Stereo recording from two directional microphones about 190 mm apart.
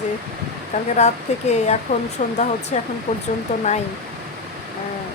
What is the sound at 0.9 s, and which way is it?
Speech, 35° left (ahead or behind).